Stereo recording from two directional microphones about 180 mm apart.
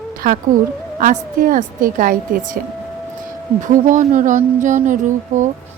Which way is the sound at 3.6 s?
45° right (ahead or behind).